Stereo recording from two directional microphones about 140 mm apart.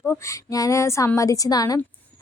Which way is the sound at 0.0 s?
20° left (ahead or behind).